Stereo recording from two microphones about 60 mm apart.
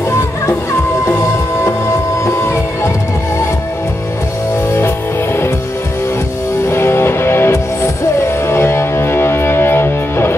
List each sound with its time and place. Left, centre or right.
2.2 s music: left
4.7 s music: left
6.7 s music: left